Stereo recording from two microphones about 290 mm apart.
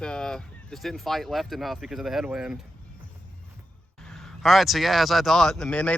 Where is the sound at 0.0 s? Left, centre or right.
Centre.